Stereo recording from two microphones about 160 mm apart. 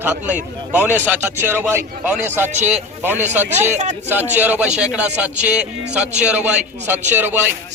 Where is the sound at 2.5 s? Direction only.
45° right (ahead or behind).